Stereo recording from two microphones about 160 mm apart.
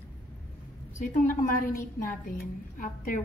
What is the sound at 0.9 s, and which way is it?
A woman's voice, 55° left (ahead or behind).